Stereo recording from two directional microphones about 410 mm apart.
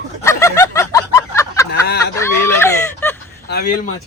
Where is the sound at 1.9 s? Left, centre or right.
Left.